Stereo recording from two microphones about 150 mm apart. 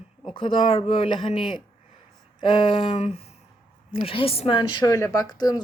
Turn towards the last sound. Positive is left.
turn(degrees=25)  # may be behind; listen again after turning